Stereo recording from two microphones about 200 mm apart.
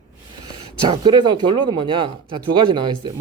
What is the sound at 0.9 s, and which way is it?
Speech, 25° right (ahead or behind).